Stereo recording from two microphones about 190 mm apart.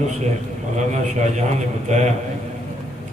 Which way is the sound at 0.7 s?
40° right (ahead or behind).